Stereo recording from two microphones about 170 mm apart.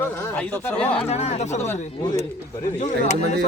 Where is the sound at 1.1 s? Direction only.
40° left (ahead or behind).